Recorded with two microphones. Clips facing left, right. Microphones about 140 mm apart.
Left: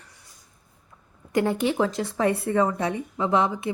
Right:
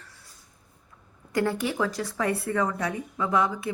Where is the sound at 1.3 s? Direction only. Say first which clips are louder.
Left 3 dB; 20° left (ahead or behind).